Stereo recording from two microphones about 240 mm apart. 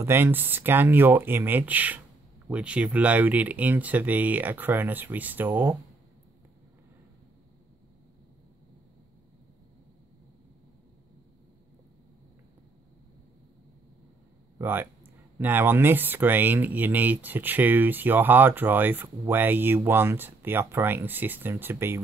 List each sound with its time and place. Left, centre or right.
0.0 s speech: centre
14.6 s speech: centre